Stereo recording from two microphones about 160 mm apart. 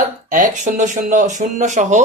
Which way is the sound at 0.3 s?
55° right (ahead or behind).